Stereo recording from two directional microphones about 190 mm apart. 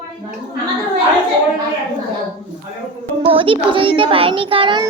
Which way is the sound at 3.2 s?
30° right (ahead or behind).